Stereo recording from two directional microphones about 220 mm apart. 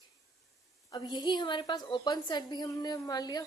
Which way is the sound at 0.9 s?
15° left (ahead or behind).